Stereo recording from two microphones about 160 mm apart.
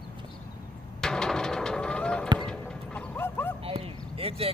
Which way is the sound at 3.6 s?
35° right (ahead or behind).